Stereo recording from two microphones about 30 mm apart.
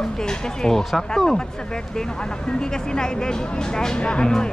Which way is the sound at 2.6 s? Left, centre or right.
Left.